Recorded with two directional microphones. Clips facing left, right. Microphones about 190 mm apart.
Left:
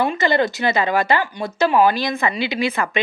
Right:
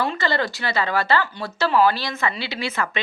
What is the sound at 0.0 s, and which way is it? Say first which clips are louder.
Speech: left 5 dB; 15° left (ahead or behind).